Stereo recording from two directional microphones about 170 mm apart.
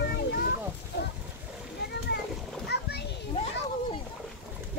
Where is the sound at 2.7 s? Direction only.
80° left.